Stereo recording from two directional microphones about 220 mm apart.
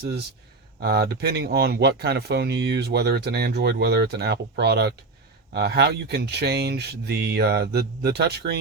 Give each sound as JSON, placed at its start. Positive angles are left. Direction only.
{"t": 0.8, "sound": "speech", "side_deg": -45}